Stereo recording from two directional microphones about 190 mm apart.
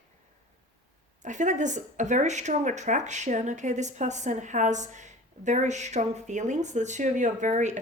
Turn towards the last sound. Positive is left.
turn(degrees=-40)  # may be behind; listen again after turning